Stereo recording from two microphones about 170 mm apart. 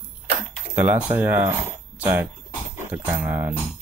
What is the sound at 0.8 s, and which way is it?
Speech, 10° right (ahead or behind).